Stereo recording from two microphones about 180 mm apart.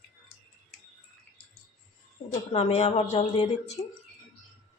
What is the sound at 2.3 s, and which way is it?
A woman's voice, 35° left (ahead or behind).